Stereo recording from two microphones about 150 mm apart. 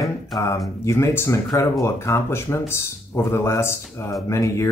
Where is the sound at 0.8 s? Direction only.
20° left (ahead or behind).